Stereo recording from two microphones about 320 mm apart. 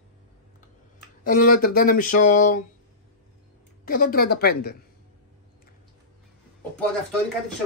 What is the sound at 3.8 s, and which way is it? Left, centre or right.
Speech, left.